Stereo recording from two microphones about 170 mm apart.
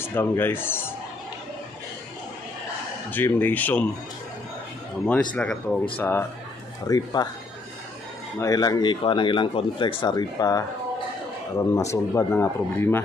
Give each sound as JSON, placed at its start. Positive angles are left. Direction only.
{"t": 0.0, "sound": "speech", "side_deg": 10}
{"t": 3.1, "sound": "speech", "side_deg": 10}
{"t": 5.3, "sound": "speech", "side_deg": 5}
{"t": 6.9, "sound": "speech", "side_deg": 25}
{"t": 8.4, "sound": "speech", "side_deg": 20}